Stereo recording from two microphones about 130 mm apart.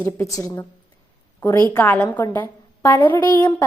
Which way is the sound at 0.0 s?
25° left (ahead or behind).